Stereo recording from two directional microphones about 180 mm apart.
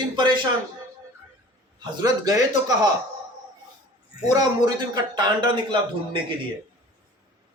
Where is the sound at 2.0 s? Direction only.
20° right (ahead or behind).